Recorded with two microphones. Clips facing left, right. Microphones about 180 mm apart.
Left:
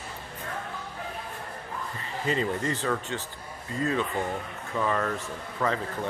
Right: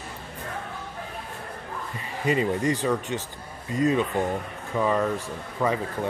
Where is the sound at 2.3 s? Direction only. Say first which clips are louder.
Right 5 dB; 15° right (ahead or behind).